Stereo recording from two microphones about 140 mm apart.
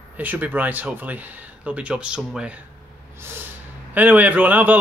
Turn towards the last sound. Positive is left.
turn(degrees=-10)  # may be behind; listen again after turning